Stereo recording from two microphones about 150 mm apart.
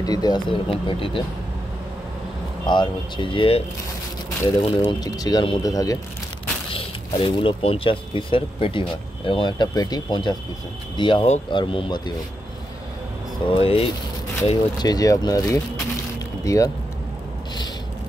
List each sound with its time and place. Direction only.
0.0 s speech: 25° left (ahead or behind)
2.6 s speech: 30° left (ahead or behind)
4.6 s speech: 30° left (ahead or behind)
6.7 s speech: 35° left (ahead or behind)
13.5 s speech: 40° left (ahead or behind); by 16.7 s 20° left (ahead or behind)